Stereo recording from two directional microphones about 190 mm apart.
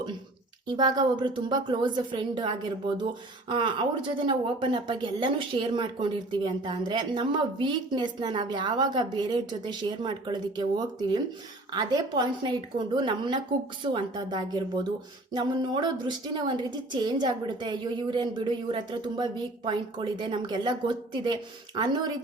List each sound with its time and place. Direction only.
0.8 s a woman's voice: 25° right (ahead or behind)